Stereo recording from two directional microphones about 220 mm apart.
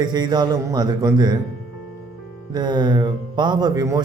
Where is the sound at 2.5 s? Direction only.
20° right (ahead or behind).